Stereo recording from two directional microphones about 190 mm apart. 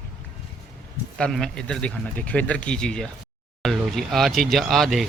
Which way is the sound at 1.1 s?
5° left (ahead or behind).